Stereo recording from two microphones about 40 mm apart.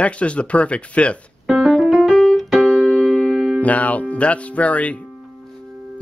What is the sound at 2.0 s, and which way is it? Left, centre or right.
Keyboard, centre.